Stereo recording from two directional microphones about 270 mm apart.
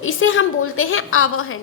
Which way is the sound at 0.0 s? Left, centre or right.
Left.